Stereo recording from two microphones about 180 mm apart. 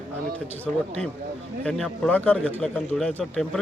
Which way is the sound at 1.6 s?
5° left (ahead or behind).